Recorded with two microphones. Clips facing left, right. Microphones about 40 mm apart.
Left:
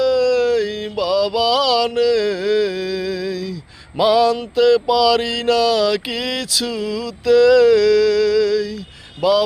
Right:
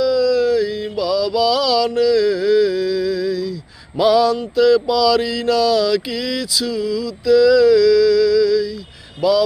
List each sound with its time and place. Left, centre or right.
0.0 s a sound: left
0.9 s mantra: left
3.9 s speech: left
4.5 s mantra: left
9.2 s speech: left